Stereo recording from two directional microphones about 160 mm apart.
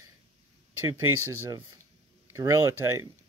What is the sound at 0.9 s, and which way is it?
Speech, 20° right (ahead or behind).